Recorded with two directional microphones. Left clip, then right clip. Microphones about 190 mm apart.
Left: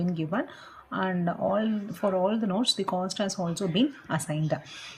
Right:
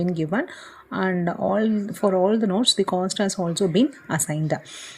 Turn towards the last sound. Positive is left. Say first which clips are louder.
# right 4 dB
turn(degrees=-35)  # may be behind; listen again after turning